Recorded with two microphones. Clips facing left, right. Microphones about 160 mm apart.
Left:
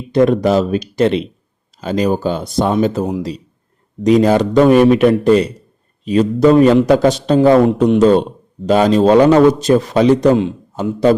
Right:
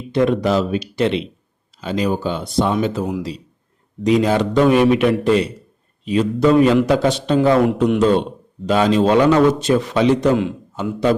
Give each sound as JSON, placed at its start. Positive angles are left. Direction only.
{"t": 0.1, "sound": "a man's voice", "side_deg": 45}